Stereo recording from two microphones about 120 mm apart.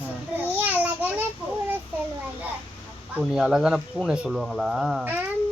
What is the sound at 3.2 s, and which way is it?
Speech, 5° right (ahead or behind).